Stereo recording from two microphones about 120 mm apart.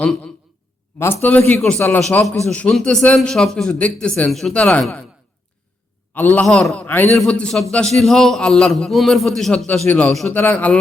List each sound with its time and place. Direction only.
0.0 s a man's voice: 5° left (ahead or behind)
0.9 s a man's voice: 20° left (ahead or behind)
6.1 s a man's voice: 15° left (ahead or behind)
6.4 s a man's voice: 5° left (ahead or behind)
6.8 s a man's voice: 15° left (ahead or behind)